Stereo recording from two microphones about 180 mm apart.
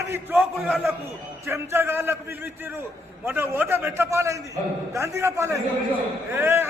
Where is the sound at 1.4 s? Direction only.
15° right (ahead or behind).